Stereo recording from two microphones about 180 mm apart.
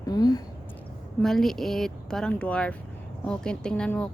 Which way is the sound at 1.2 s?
Centre (ahead or behind).